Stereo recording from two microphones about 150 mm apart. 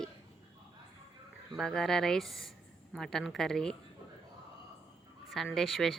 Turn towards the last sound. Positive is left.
turn(degrees=5)  # may be behind; listen again after turning